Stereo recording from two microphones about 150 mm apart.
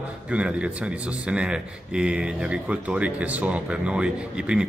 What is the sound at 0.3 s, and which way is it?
A man's voice, 10° right (ahead or behind).